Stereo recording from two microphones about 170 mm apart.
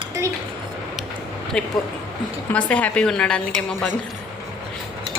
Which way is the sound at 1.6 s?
5° left (ahead or behind).